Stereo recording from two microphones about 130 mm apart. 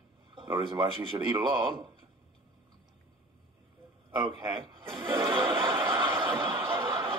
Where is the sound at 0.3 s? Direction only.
40° right (ahead or behind).